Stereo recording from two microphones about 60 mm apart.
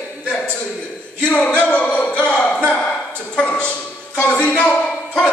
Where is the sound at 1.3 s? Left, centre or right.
Centre.